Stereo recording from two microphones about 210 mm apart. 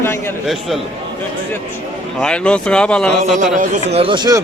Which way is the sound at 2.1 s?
5° left (ahead or behind).